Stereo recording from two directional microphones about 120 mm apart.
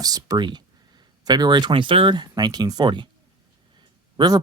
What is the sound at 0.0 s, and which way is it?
Speech, 30° right (ahead or behind).